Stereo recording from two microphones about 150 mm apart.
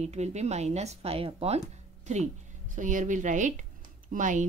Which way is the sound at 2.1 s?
50° right (ahead or behind).